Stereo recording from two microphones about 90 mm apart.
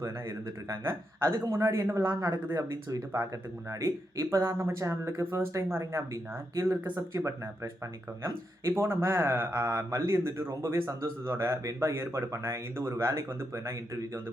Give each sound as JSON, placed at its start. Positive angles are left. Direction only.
{"t": 0.0, "sound": "speech", "side_deg": -30}